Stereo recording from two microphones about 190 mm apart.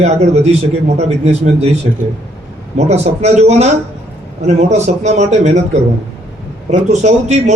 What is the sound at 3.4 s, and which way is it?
A man's voice, 35° right (ahead or behind).